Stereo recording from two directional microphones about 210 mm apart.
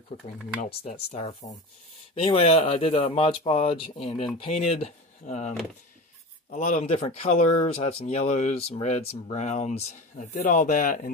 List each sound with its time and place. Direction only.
1.1 s speech: 30° left (ahead or behind)
6.5 s speech: 35° left (ahead or behind)